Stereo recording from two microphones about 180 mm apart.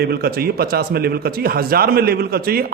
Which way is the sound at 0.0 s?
60° right (ahead or behind).